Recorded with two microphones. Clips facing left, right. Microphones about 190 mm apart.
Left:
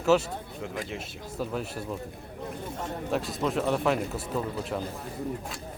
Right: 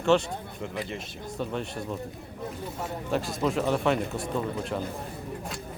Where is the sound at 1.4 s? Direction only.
5° left (ahead or behind).